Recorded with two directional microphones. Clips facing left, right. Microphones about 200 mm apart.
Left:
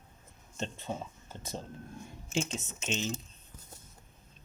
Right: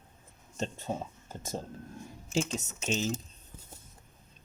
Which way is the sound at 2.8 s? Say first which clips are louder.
Right 3 dB; 40° right (ahead or behind).